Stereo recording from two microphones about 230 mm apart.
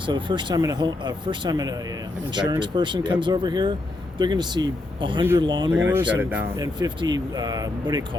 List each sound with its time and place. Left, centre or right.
0.0 s speech: centre